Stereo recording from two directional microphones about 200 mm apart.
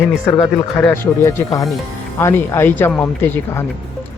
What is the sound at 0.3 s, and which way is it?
Speech, 20° left (ahead or behind).